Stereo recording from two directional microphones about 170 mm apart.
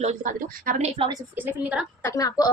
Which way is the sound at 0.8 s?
35° right (ahead or behind).